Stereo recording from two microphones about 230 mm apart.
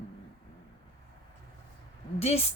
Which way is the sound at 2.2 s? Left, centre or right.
Left.